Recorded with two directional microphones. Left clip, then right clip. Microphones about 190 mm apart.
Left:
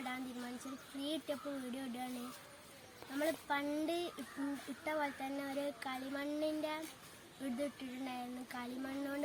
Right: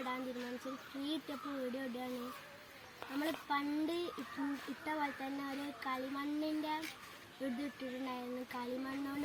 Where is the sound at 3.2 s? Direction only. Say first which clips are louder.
Left 1 dB; 10° left (ahead or behind).